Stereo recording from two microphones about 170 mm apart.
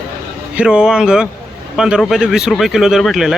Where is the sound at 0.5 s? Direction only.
5° right (ahead or behind).